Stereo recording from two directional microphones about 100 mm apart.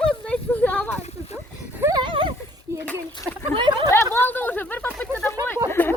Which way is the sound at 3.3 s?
25° right (ahead or behind).